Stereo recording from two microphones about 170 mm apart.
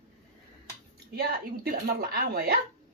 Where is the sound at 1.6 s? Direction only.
60° right (ahead or behind).